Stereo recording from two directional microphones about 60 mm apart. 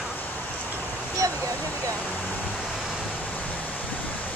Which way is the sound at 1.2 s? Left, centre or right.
Right.